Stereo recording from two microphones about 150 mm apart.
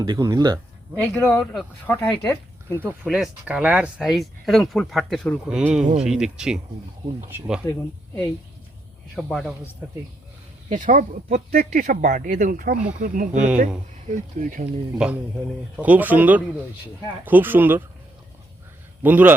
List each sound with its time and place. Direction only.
0.0 s speech: 25° right (ahead or behind)
1.3 s speech: 5° left (ahead or behind)
2.7 s speech: 15° right (ahead or behind)
9.1 s speech: centre (ahead or behind)
10.7 s speech: 60° right (ahead or behind)
14.9 s speech: 5° right (ahead or behind)
19.0 s speech: 10° right (ahead or behind)